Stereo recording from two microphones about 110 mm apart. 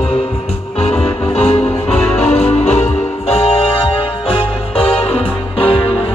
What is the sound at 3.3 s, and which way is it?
Music, 65° left (ahead or behind).